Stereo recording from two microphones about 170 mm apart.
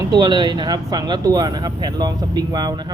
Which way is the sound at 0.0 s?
25° right (ahead or behind).